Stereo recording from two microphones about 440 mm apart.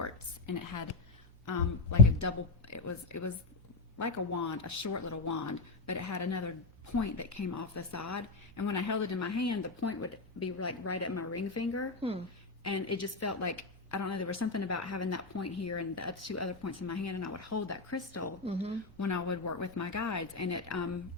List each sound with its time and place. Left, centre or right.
0.4 s a woman's voice: left